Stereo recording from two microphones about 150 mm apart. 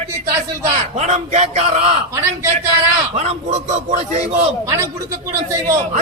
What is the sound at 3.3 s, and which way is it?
Speech, 50° right (ahead or behind).